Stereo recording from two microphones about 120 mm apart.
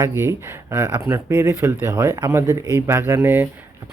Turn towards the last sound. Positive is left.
turn(degrees=-15)  # may be behind; listen again after turning